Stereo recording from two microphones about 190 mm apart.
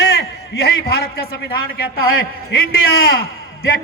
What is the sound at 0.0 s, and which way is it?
A man's voice, 60° left (ahead or behind).